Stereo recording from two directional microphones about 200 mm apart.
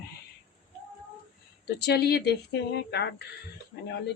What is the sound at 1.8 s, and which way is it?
Speech, 55° left (ahead or behind).